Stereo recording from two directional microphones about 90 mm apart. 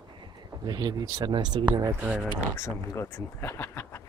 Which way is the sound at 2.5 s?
30° left (ahead or behind).